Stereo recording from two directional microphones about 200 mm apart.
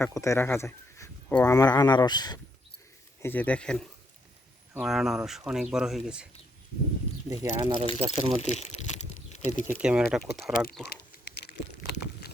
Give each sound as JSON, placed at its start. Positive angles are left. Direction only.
{"t": 0.0, "sound": "speech", "side_deg": 15}
{"t": 3.2, "sound": "speech", "side_deg": 10}
{"t": 7.3, "sound": "speech", "side_deg": -25}
{"t": 8.4, "sound": "crumpling", "side_deg": 35}
{"t": 9.6, "sound": "speech", "side_deg": -5}